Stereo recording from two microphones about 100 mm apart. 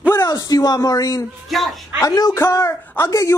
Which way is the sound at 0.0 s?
25° left (ahead or behind).